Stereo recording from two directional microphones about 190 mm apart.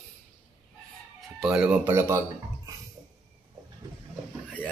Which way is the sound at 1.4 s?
5° right (ahead or behind).